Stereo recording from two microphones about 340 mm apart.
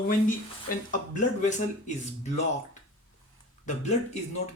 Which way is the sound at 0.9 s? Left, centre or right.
Left.